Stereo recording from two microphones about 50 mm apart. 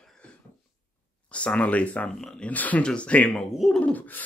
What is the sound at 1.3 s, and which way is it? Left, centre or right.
Speech, left.